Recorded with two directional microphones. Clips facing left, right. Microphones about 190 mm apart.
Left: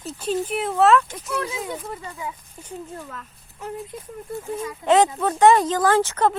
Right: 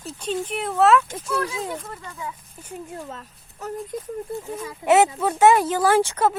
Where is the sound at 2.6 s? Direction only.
15° right (ahead or behind).